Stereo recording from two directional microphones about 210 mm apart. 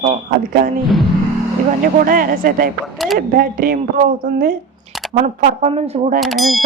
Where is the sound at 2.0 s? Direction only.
40° right (ahead or behind).